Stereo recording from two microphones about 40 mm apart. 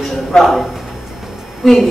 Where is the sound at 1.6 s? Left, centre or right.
Centre.